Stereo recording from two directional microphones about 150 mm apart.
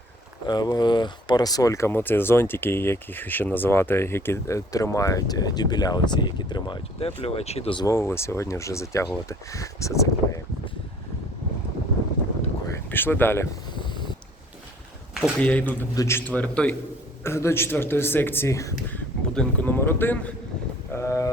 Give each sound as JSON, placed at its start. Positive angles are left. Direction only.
{"t": 0.4, "sound": "speech", "side_deg": 30}
{"t": 7.2, "sound": "speech", "side_deg": 45}
{"t": 7.8, "sound": "speech", "side_deg": 20}
{"t": 12.7, "sound": "speech", "side_deg": 15}
{"t": 15.4, "sound": "speech", "side_deg": 10}
{"t": 19.3, "sound": "speech", "side_deg": 5}